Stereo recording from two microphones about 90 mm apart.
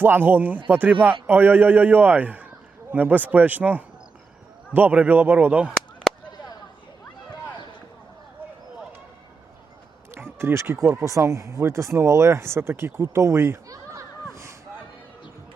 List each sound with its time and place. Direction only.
0.0 s a man's voice: 20° right (ahead or behind)
6.1 s a sound: centre (ahead or behind)
10.3 s speech: 30° right (ahead or behind)